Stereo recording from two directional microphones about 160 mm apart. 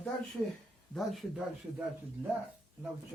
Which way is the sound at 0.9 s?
Centre (ahead or behind).